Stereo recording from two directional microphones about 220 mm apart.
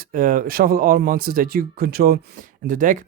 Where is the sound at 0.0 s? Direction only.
40° right (ahead or behind).